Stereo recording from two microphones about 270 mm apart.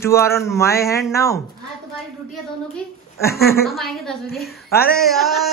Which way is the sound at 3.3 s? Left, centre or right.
Left.